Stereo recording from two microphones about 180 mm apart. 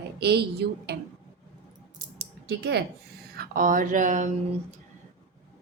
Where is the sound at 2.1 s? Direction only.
65° right (ahead or behind).